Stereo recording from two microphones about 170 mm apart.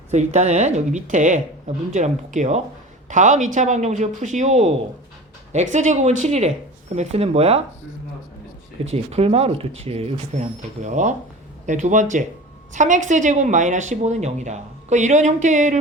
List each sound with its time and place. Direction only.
0.1 s speech: 40° right (ahead or behind)
8.8 s speech: 35° right (ahead or behind)